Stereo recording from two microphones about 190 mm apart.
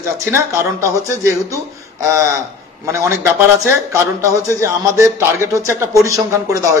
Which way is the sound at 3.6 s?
15° right (ahead or behind).